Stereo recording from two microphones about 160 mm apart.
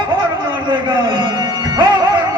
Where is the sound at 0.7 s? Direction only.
25° right (ahead or behind).